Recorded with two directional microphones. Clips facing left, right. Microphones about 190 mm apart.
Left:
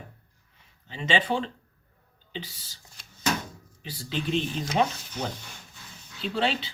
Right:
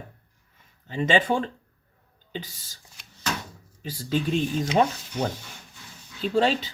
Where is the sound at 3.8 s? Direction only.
45° right (ahead or behind).